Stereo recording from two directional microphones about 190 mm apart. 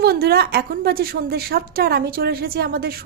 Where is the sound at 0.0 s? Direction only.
55° right (ahead or behind).